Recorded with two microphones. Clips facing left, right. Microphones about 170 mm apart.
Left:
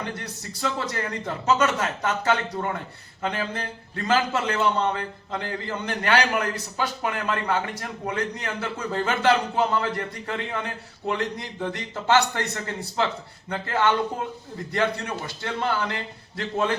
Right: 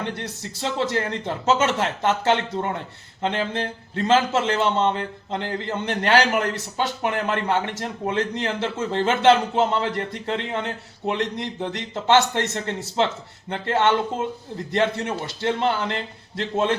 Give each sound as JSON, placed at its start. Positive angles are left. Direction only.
{"t": 0.6, "sound": "a man's voice", "side_deg": -25}